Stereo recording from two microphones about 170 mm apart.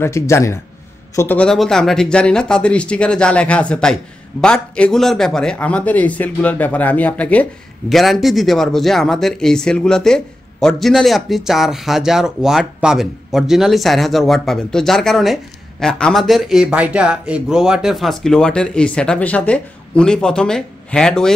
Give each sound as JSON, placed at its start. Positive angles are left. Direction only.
{"t": 0.0, "sound": "speech", "side_deg": 15}